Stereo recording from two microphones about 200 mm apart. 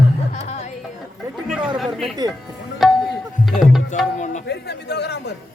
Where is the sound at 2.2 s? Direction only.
20° right (ahead or behind).